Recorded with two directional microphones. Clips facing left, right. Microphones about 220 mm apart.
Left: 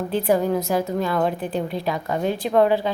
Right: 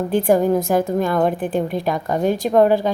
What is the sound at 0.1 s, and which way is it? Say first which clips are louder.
A woman's voice: right 4 dB; 45° right (ahead or behind).